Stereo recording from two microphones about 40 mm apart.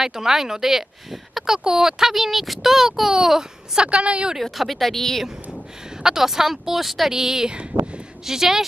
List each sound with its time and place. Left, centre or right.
0.0 s speech: centre
3.8 s a woman's voice: right
4.4 s a woman's voice: centre
6.0 s speech: centre